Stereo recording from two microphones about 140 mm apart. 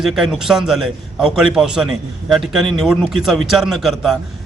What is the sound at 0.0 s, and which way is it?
A man's voice, 5° right (ahead or behind).